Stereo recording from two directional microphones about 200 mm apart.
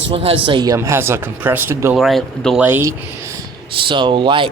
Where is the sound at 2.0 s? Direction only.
Centre (ahead or behind).